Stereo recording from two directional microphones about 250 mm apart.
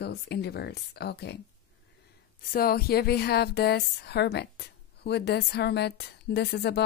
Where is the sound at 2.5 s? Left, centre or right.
Left.